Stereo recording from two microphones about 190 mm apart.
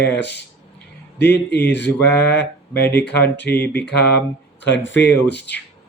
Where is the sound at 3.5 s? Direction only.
10° left (ahead or behind).